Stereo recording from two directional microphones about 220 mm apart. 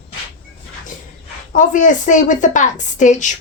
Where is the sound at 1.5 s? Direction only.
35° left (ahead or behind).